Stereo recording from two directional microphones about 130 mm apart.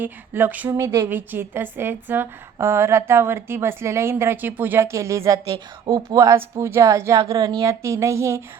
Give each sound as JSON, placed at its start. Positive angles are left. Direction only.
{"t": 0.0, "sound": "a woman's voice", "side_deg": -15}
{"t": 5.8, "sound": "speech", "side_deg": -35}